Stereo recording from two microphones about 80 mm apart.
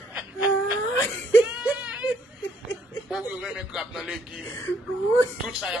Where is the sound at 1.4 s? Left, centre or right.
Centre.